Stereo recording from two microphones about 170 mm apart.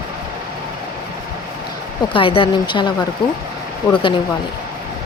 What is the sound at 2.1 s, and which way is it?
Speech, 30° left (ahead or behind).